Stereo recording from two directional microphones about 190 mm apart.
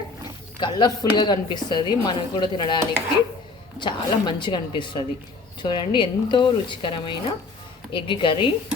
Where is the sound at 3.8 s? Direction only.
25° left (ahead or behind).